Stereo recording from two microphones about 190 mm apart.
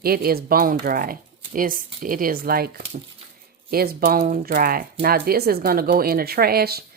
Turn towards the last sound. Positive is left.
turn(degrees=-55)  # may be behind; listen again after turning